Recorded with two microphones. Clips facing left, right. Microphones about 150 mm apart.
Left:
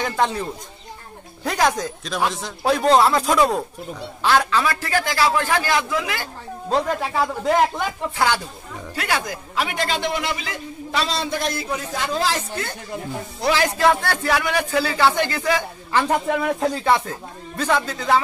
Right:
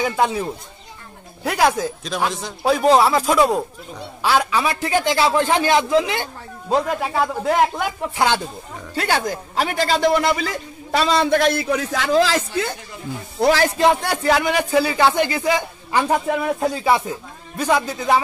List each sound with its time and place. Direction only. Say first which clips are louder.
0.0 s a man's voice: right 2 dB; 10° right (ahead or behind)
6.7 s speech: right 2 dB; 5° right (ahead or behind)
8.9 s a man's voice: right 4 dB; 30° right (ahead or behind); by 12.4 s 90° right
13.4 s a man's voice: right 4 dB; 45° right (ahead or behind)
13.7 s speech: right 1 dB; 15° right (ahead or behind)